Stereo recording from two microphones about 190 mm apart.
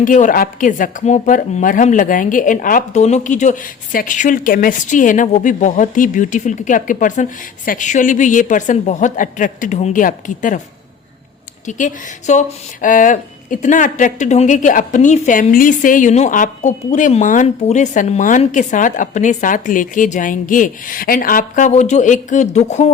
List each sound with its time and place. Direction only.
0.0 s a woman's voice: 45° left (ahead or behind)
11.6 s speech: 40° left (ahead or behind)